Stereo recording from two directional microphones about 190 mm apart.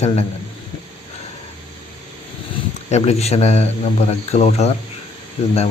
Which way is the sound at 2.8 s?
35° left (ahead or behind).